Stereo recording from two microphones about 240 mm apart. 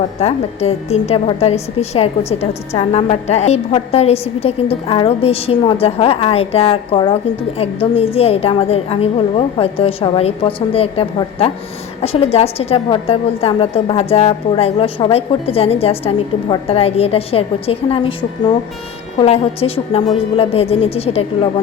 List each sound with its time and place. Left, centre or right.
0.2 s a woman's voice: left